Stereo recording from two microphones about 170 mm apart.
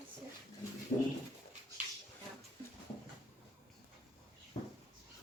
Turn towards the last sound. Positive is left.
turn(degrees=40)  # may be behind; listen again after turning